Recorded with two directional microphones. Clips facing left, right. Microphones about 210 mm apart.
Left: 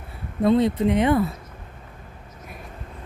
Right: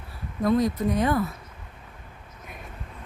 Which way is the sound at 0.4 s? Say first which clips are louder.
Left 4 dB; 25° left (ahead or behind).